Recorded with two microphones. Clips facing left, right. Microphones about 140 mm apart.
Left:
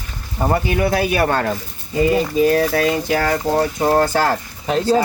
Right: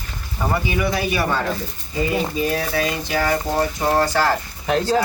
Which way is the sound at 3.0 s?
50° left (ahead or behind).